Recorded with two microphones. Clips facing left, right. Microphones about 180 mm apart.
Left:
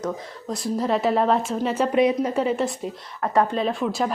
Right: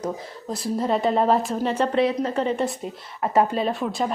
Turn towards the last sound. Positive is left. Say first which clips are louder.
# left 1 dB
turn(degrees=0)  # may be behind; listen again after turning